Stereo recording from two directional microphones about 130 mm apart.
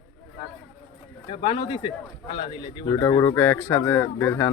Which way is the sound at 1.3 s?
40° left (ahead or behind).